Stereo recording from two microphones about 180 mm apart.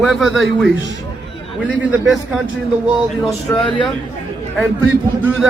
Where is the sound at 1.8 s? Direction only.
5° right (ahead or behind).